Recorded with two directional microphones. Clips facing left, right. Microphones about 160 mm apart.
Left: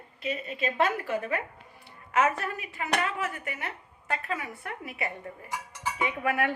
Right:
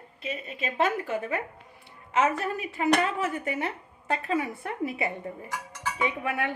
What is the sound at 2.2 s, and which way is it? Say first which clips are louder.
A woman's voice: right 1 dB; 30° right (ahead or behind).